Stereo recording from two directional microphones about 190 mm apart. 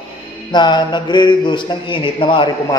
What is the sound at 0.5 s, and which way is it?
Mantra, 25° left (ahead or behind).